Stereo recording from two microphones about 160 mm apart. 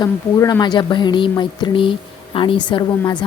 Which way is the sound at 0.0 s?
25° left (ahead or behind).